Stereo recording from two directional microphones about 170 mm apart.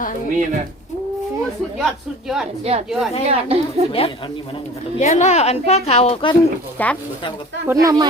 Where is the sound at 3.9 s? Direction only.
30° left (ahead or behind).